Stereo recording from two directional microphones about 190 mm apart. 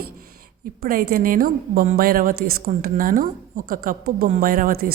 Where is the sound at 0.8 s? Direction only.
50° right (ahead or behind).